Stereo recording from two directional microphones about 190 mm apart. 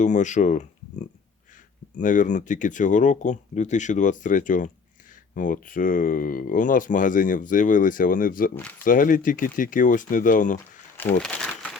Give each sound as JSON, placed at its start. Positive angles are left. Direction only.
{"t": 0.0, "sound": "speech", "side_deg": 40}
{"t": 11.2, "sound": "crumpling", "side_deg": 5}